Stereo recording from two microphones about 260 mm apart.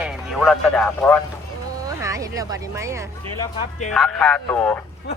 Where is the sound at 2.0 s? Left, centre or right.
Centre.